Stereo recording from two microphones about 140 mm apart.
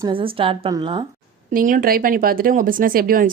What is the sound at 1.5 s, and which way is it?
Speech, 80° right.